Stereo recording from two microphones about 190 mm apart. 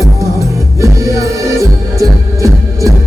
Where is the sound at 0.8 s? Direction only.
15° right (ahead or behind).